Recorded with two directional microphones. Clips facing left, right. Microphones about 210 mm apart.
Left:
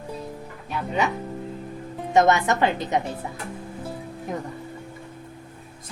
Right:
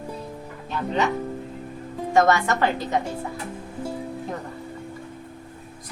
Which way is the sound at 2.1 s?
20° left (ahead or behind).